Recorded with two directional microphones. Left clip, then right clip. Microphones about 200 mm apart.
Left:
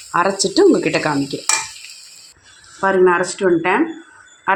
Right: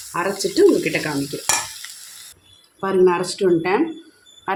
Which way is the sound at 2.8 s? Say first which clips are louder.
Left 3 dB; 15° left (ahead or behind).